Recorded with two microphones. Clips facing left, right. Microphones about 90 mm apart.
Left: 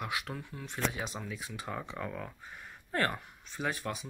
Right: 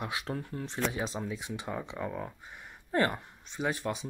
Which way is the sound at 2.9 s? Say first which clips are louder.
Right 4 dB; 20° right (ahead or behind).